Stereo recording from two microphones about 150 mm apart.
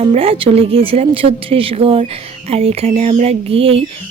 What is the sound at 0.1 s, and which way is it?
Speech, 40° right (ahead or behind).